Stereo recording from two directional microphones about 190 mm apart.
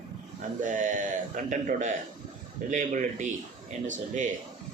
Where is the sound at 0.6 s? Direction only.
40° right (ahead or behind).